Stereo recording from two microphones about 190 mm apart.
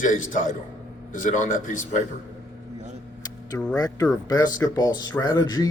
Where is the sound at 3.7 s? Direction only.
20° left (ahead or behind).